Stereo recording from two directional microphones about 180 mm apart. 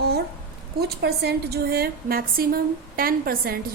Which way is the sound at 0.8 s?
65° right (ahead or behind).